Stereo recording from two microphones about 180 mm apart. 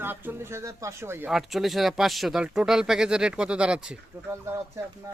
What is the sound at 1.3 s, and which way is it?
Speech, centre (ahead or behind).